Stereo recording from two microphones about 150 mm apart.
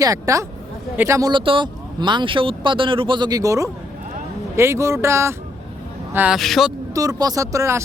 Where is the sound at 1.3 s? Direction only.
35° right (ahead or behind); by 6.7 s centre (ahead or behind).